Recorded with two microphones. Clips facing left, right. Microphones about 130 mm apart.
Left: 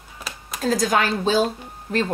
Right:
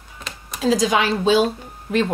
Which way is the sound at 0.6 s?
45° left (ahead or behind).